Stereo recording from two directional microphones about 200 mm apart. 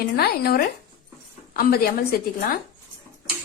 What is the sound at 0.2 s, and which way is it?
A woman's voice, 50° left (ahead or behind).